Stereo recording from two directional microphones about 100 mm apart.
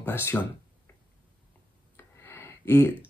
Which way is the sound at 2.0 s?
25° left (ahead or behind).